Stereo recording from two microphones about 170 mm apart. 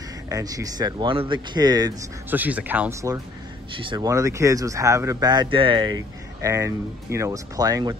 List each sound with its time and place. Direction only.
0.3 s speech: 20° right (ahead or behind)
2.3 s speech: 10° right (ahead or behind)
3.7 s speech: 30° right (ahead or behind)